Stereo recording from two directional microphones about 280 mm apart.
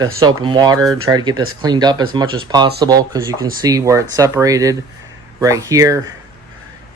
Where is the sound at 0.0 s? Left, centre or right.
Centre.